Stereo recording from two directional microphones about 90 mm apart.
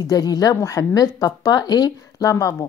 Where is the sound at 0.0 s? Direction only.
45° left (ahead or behind).